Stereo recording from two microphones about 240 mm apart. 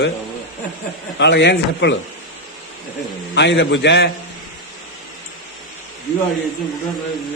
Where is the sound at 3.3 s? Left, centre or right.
Left.